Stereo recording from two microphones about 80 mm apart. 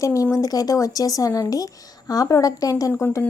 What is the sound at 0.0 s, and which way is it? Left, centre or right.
Speech, left.